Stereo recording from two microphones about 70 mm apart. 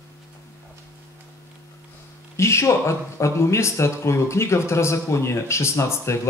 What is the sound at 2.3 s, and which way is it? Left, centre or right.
Speech, left.